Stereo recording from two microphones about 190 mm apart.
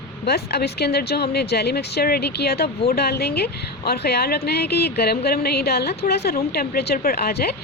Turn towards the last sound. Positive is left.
turn(degrees=55)  # may be behind; listen again after turning